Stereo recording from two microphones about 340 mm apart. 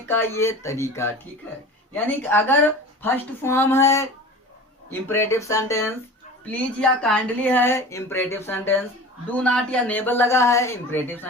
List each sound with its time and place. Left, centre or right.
0.1 s speech: centre